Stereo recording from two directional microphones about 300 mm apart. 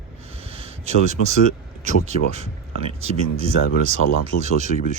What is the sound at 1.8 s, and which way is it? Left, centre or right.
Speech, right.